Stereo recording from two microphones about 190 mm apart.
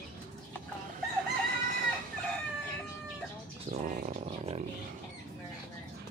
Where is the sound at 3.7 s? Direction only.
40° right (ahead or behind).